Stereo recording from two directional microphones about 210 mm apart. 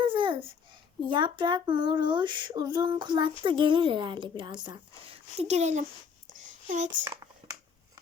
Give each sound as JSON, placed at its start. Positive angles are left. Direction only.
{"t": 0.1, "sound": "babbling", "side_deg": -25}
{"t": 1.0, "sound": "female singing", "side_deg": -20}
{"t": 6.3, "sound": "a sound", "side_deg": -35}